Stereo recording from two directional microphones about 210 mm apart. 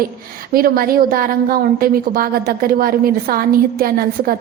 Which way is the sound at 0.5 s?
45° right (ahead or behind).